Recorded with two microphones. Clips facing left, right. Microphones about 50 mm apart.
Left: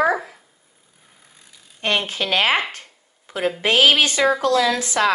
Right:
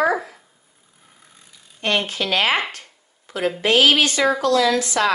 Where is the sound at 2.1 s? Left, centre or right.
Left.